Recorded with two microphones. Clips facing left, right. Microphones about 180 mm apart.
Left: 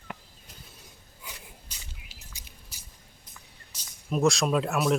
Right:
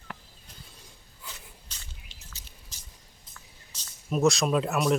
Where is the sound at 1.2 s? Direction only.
10° left (ahead or behind).